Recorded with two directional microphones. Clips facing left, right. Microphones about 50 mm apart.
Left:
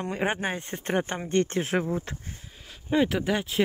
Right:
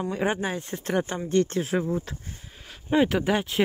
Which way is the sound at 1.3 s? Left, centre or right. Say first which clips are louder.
Right 2 dB; left.